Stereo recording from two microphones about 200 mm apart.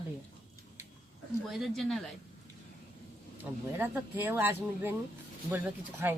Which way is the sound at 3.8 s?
10° right (ahead or behind).